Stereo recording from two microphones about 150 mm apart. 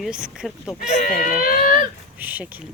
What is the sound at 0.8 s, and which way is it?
Speech, 60° left (ahead or behind).